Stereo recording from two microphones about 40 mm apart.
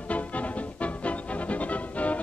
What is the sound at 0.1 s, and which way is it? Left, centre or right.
Music, left.